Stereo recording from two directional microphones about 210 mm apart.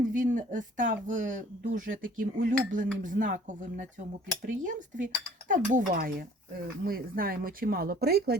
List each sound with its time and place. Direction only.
0.0 s speech: 40° right (ahead or behind)